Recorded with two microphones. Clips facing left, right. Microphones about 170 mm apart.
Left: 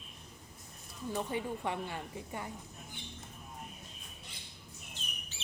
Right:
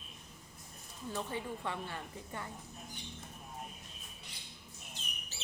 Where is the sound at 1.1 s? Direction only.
15° left (ahead or behind).